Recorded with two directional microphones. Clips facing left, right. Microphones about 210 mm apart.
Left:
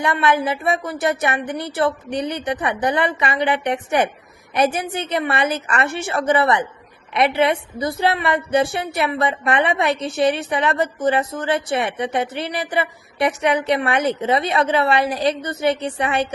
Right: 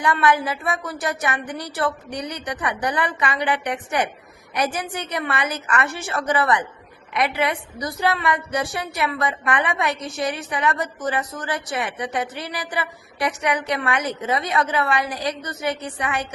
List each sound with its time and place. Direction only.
0.0 s a woman's voice: 25° left (ahead or behind)